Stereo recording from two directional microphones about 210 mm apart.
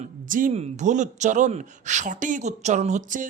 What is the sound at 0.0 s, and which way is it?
Speech, 40° right (ahead or behind).